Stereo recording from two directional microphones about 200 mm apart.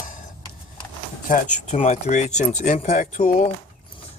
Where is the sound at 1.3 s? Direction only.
35° left (ahead or behind).